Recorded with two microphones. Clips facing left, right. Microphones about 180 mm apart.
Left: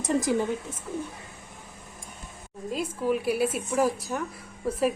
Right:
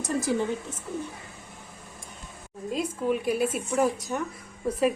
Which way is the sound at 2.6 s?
Centre (ahead or behind).